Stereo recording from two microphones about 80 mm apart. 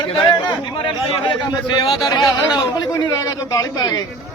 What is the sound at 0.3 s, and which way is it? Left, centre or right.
Speech, left.